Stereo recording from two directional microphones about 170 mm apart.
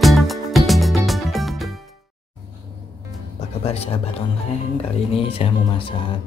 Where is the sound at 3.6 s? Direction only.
35° left (ahead or behind).